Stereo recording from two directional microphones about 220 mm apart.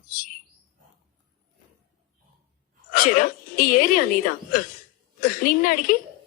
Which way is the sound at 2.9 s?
40° left (ahead or behind).